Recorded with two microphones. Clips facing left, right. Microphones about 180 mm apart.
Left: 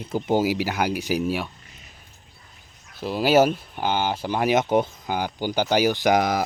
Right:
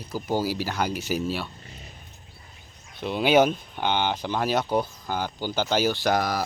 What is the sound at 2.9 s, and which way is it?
Speech, 5° left (ahead or behind).